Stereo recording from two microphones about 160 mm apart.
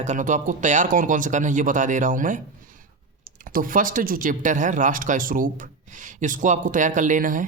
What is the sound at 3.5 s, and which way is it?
Speech, 60° right (ahead or behind).